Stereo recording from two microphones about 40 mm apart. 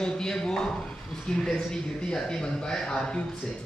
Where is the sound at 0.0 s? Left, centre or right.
Centre.